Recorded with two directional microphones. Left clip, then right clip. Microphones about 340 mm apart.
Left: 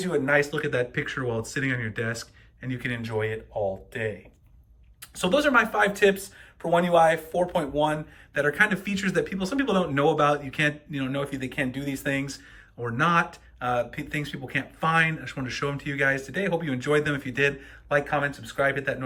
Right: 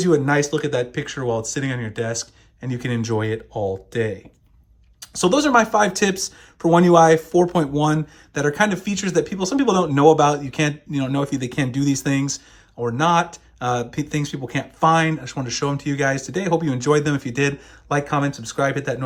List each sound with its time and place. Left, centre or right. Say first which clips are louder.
0.0 s speech: right 5 dB; centre
4.9 s speech: right 5 dB; centre